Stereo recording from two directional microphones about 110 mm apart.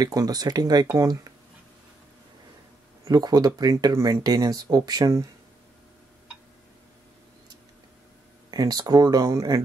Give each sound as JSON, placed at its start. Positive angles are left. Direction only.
{"t": 0.0, "sound": "speech", "side_deg": -35}
{"t": 3.1, "sound": "speech", "side_deg": -35}
{"t": 8.5, "sound": "speech", "side_deg": -35}